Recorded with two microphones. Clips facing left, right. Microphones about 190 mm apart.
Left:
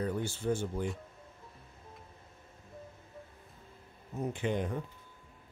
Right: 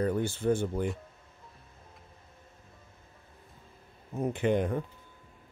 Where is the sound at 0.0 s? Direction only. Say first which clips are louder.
Right 5 dB; 55° right (ahead or behind).